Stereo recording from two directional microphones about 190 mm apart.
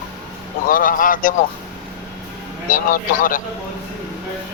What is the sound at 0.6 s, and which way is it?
Speech, 45° left (ahead or behind).